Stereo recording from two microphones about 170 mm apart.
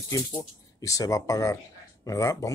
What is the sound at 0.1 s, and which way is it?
Speech, 20° left (ahead or behind).